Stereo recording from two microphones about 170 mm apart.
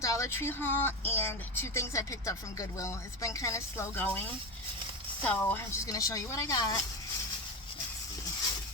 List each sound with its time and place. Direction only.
0.0 s speech: 20° left (ahead or behind)
5.2 s a woman's voice: 10° left (ahead or behind)